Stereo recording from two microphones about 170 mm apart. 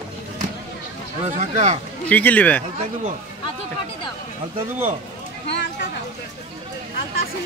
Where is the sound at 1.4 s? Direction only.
45° right (ahead or behind).